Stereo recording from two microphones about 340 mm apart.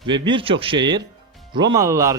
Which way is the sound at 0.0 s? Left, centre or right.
Centre.